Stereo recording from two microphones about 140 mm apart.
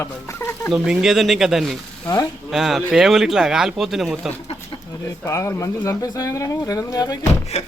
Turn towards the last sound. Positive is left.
turn(degrees=50)  # may be behind; listen again after turning